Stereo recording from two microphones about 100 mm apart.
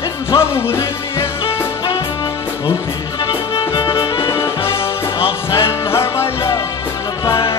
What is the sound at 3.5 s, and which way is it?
Music, 50° left (ahead or behind).